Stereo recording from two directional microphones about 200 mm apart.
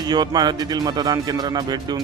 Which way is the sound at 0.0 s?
20° right (ahead or behind).